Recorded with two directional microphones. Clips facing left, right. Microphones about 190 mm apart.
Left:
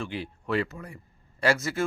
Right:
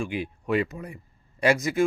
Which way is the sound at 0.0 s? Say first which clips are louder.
Right 4 dB; 15° right (ahead or behind).